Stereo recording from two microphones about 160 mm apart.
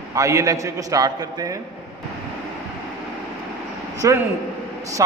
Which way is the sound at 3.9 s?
20° right (ahead or behind).